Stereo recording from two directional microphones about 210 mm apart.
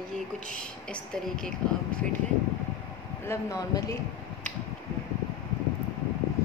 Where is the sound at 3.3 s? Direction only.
15° left (ahead or behind).